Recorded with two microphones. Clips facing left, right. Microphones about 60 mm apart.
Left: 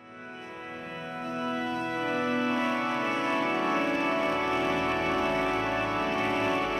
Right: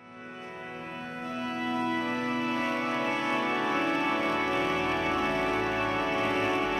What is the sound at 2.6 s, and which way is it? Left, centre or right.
Organ, centre.